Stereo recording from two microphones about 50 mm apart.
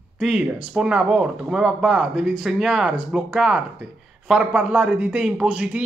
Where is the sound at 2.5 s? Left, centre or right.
Centre.